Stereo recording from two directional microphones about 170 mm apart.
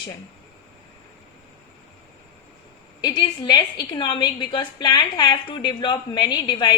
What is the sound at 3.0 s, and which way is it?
A woman's voice, 25° left (ahead or behind).